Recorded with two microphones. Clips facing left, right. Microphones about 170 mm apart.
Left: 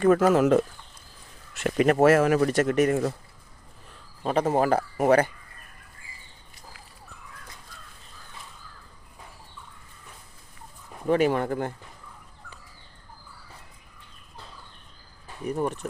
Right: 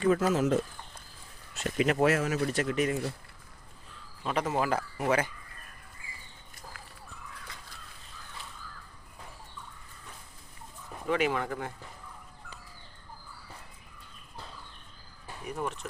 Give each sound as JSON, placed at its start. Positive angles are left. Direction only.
{"t": 0.0, "sound": "speech", "side_deg": 55}
{"t": 1.6, "sound": "speech", "side_deg": 50}
{"t": 4.2, "sound": "speech", "side_deg": 35}
{"t": 11.1, "sound": "speech", "side_deg": 45}
{"t": 15.4, "sound": "speech", "side_deg": 40}